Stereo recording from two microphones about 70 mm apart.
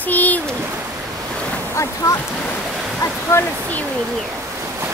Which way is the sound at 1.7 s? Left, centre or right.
Left.